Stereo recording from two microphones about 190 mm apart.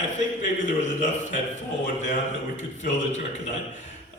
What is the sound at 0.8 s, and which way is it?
Speech, 40° left (ahead or behind).